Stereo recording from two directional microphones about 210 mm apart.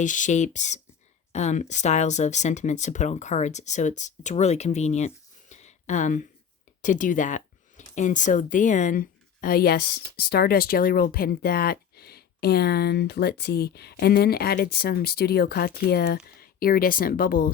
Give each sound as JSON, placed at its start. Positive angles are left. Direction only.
{"t": 0.0, "sound": "speech", "side_deg": 35}